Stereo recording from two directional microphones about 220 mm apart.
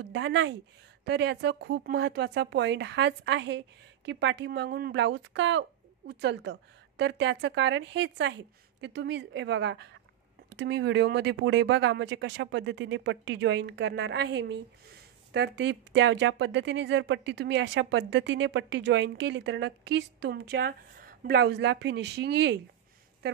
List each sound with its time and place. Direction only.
0.0 s speech: 55° right (ahead or behind)